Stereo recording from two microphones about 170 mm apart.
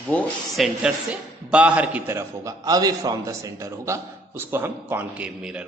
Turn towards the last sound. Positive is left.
turn(degrees=-5)  # may be behind; listen again after turning